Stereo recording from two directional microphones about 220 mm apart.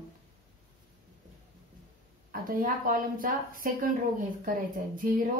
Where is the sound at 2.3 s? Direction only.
40° right (ahead or behind).